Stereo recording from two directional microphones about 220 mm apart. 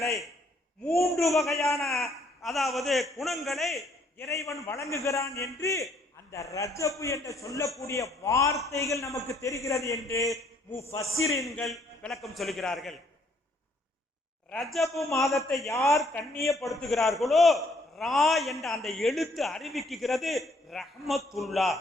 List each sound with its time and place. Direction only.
0.0 s a man's voice: centre (ahead or behind)
4.6 s a man's voice: 15° left (ahead or behind)
11.6 s a man's voice: centre (ahead or behind)
14.5 s a man's voice: centre (ahead or behind)